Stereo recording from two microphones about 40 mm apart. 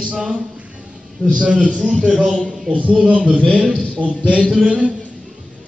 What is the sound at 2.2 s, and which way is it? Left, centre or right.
A man's voice, centre.